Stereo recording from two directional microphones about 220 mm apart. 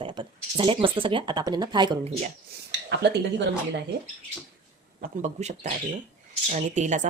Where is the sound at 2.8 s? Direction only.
50° right (ahead or behind).